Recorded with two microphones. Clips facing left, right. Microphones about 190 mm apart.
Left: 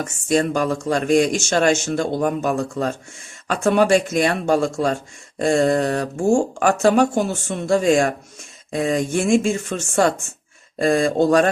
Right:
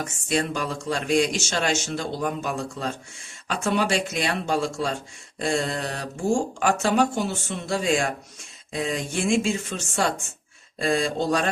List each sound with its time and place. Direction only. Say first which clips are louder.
0.0 s speech: left 6 dB; 45° left (ahead or behind)